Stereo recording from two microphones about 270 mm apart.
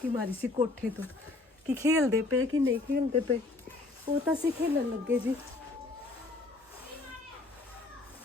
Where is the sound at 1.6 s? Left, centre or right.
Centre.